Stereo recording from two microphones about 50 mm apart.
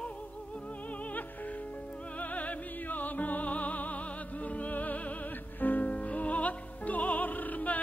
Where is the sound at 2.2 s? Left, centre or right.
Left.